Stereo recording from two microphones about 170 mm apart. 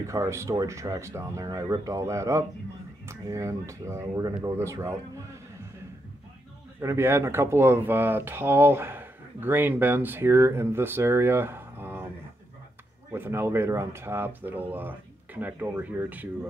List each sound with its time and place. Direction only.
0.0 s speech: 15° right (ahead or behind)
6.8 s speech: 15° right (ahead or behind)
13.1 s speech: 15° right (ahead or behind)